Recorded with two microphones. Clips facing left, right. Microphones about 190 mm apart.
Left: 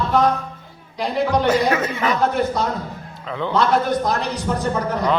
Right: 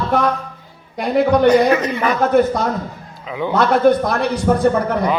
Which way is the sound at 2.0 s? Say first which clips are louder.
Right 5 dB; 50° right (ahead or behind).